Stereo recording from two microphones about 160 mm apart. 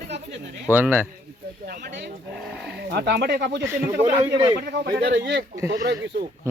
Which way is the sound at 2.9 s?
90° right.